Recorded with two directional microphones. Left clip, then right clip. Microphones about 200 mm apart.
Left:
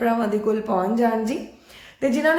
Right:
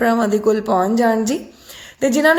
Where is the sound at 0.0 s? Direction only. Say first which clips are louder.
Right 6 dB; 45° right (ahead or behind).